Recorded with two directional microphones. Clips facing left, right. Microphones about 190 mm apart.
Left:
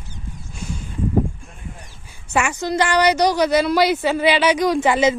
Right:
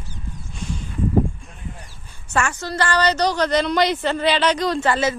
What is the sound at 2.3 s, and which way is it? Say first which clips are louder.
A woman's voice: left 3 dB; 10° left (ahead or behind).